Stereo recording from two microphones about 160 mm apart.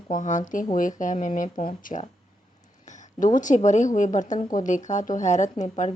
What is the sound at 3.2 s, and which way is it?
Speech, 50° left (ahead or behind).